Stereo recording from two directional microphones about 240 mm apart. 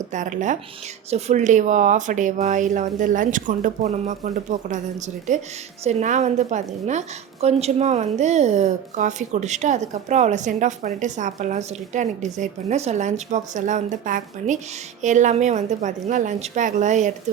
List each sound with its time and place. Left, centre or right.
0.1 s a woman's voice: right